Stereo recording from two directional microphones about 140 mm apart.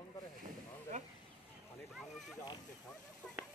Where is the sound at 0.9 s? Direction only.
65° right (ahead or behind).